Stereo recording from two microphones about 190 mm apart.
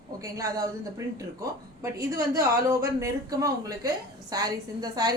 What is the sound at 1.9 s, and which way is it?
A woman's voice, 15° right (ahead or behind).